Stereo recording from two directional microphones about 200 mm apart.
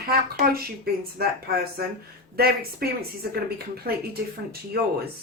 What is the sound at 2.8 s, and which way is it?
A woman's voice, 50° right (ahead or behind).